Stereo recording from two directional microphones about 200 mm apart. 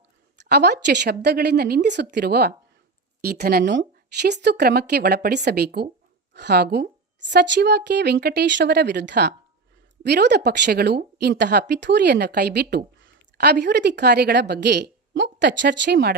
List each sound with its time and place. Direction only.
0.3 s a woman's voice: 55° right (ahead or behind)